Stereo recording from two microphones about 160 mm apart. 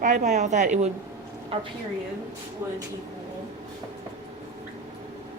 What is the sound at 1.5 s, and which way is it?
Speech, 35° right (ahead or behind).